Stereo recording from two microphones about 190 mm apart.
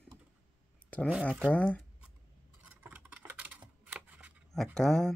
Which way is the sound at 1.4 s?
5° left (ahead or behind).